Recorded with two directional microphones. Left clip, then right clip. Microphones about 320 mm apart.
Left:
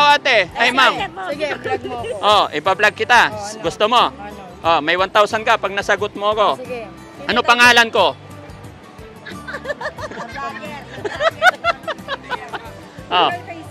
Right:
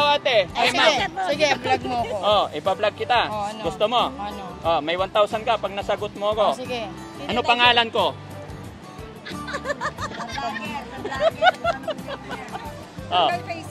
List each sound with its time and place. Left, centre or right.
0.0 s speech: left
1.0 s speech: right
2.2 s speech: left
9.7 s music: centre
11.1 s speech: left